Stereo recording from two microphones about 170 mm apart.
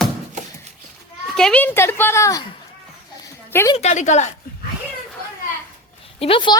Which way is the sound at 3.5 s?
15° left (ahead or behind).